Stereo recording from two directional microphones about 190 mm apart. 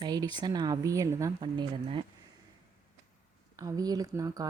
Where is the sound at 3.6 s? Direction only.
20° right (ahead or behind).